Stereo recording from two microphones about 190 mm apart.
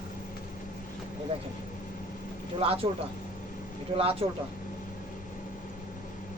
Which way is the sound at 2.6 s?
30° right (ahead or behind).